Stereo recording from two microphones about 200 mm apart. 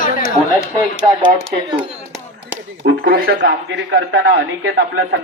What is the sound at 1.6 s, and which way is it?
Speech, 25° right (ahead or behind).